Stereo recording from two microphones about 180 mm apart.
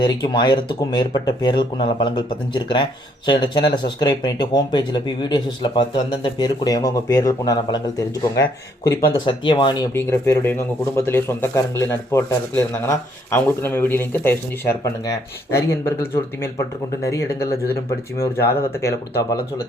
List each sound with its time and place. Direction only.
0.0 s speech: 25° left (ahead or behind)
3.2 s speech: 25° left (ahead or behind)
9.9 s speech: 15° left (ahead or behind)
17.0 s speech: 15° left (ahead or behind)